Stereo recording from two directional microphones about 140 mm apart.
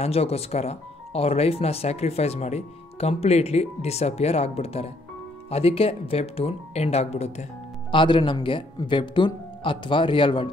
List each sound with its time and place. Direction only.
0.0 s speech: 45° left (ahead or behind)
7.9 s speech: 35° left (ahead or behind)